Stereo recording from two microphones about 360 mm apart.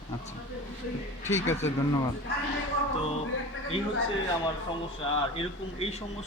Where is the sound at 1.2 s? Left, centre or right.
Centre.